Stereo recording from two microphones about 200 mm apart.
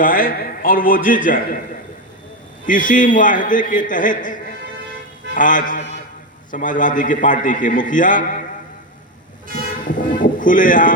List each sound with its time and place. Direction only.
0.0 s a man's voice: 45° left (ahead or behind)
2.6 s a man's voice: 40° left (ahead or behind)
9.8 s speech: 40° left (ahead or behind)